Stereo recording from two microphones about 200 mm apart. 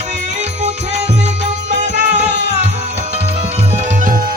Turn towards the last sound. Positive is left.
turn(degrees=-45)  # may be behind; listen again after turning